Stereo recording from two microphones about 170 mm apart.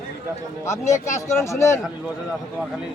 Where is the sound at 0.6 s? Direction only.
15° left (ahead or behind).